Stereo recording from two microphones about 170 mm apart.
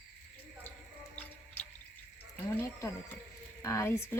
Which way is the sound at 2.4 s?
15° left (ahead or behind).